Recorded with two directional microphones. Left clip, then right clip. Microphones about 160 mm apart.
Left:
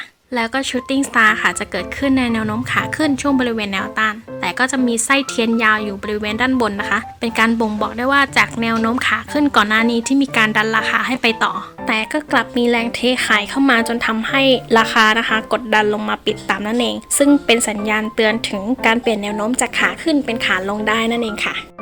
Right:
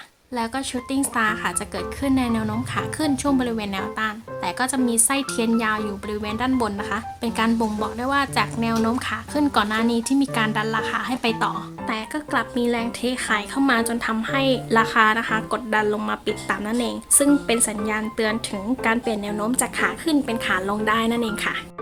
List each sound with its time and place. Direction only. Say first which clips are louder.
0.3 s a woman's voice: left 7 dB; 20° left (ahead or behind)